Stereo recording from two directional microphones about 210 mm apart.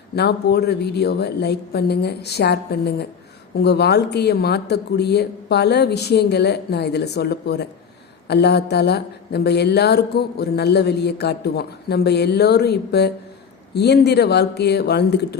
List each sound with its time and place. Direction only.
0.2 s speech: 50° left (ahead or behind)